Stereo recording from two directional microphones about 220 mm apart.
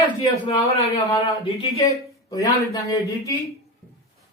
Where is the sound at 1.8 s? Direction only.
15° left (ahead or behind).